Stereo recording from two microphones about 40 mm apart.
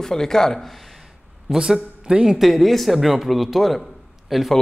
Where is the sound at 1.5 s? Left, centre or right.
Centre.